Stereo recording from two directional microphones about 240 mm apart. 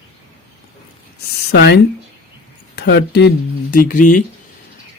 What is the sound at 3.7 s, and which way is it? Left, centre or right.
Speech, left.